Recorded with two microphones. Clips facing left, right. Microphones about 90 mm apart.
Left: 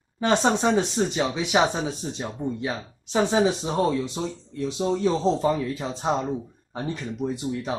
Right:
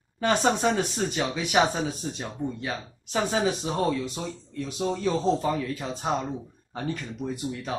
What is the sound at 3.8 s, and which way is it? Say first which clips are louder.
Speech: left 4 dB; centre (ahead or behind).